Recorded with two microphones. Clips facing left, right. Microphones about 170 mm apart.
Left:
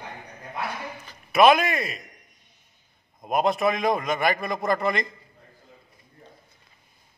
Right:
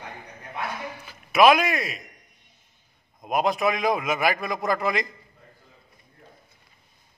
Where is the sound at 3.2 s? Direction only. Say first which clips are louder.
Left 1 dB; centre (ahead or behind).